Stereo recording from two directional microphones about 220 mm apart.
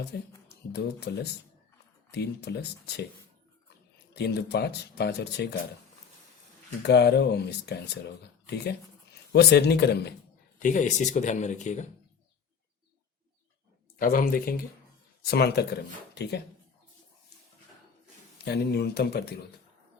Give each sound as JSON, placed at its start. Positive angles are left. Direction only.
{"t": 0.0, "sound": "speech", "side_deg": 50}
{"t": 6.8, "sound": "speech", "side_deg": 50}
{"t": 10.6, "sound": "speech", "side_deg": 35}
{"t": 14.0, "sound": "speech", "side_deg": 40}
{"t": 18.4, "sound": "speech", "side_deg": 45}